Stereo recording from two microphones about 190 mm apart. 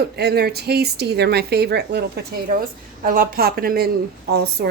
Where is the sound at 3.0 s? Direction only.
50° right (ahead or behind).